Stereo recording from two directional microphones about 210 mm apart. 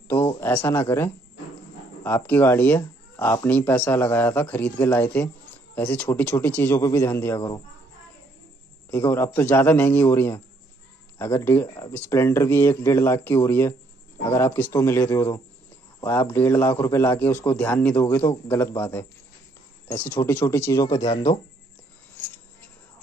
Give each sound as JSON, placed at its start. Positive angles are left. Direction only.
{"t": 0.1, "sound": "a man's voice", "side_deg": 10}
{"t": 8.9, "sound": "a man's voice", "side_deg": 10}